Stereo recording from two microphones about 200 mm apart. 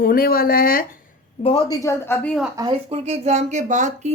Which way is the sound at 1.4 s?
25° left (ahead or behind).